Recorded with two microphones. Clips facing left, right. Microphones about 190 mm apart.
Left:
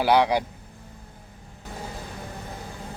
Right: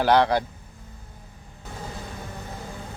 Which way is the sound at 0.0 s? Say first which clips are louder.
Right 1 dB; 10° left (ahead or behind).